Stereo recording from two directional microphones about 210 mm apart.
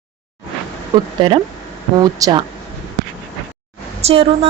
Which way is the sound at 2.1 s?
15° right (ahead or behind).